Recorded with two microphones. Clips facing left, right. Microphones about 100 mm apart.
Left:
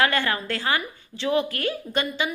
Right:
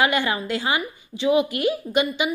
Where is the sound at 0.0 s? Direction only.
15° right (ahead or behind).